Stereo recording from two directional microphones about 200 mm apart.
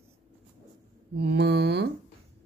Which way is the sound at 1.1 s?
55° right (ahead or behind).